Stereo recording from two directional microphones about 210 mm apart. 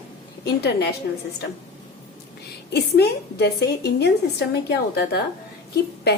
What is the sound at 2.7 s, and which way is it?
A woman's voice, 50° left (ahead or behind).